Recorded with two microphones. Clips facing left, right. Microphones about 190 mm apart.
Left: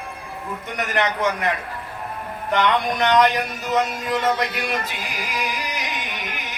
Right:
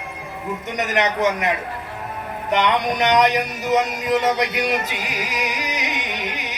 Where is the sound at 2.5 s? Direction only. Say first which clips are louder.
Right 1 dB; 20° right (ahead or behind).